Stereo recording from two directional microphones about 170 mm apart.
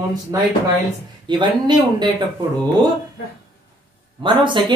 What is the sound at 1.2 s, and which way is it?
Speech, 25° right (ahead or behind).